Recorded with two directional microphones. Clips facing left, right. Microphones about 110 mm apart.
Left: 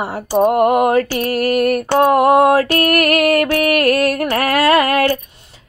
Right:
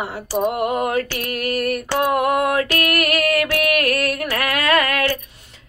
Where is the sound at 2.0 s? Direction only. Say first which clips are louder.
Left 8 dB; 35° left (ahead or behind).